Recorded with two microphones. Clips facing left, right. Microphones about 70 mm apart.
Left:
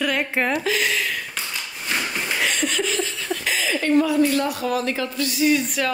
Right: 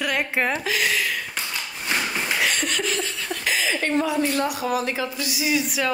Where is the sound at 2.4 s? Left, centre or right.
Centre.